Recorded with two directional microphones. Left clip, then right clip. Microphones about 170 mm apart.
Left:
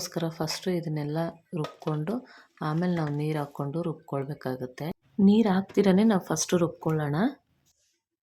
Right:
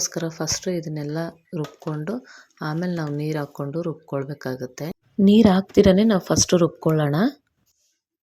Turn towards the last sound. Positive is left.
turn(degrees=-25)  # may be behind; listen again after turning